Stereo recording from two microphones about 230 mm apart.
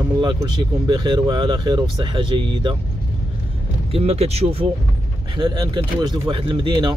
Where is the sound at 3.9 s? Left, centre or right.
Right.